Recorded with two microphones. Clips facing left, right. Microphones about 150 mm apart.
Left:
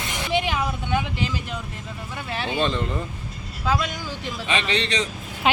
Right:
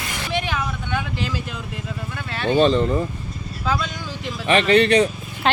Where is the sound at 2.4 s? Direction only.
50° right (ahead or behind).